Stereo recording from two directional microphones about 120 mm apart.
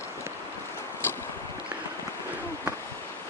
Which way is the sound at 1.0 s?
20° left (ahead or behind).